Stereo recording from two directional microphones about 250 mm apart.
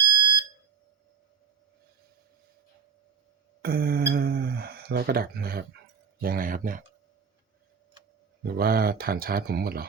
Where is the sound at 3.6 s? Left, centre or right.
Right.